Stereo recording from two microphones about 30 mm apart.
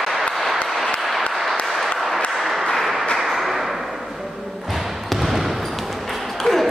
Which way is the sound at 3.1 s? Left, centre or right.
Centre.